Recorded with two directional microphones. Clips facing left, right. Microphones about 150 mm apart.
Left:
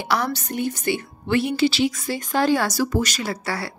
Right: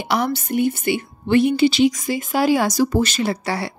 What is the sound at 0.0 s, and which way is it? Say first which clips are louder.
A woman's voice: right 3 dB; 15° right (ahead or behind).